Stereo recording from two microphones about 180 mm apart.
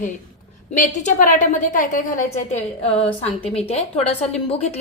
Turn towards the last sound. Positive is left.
turn(degrees=35)  # may be behind; listen again after turning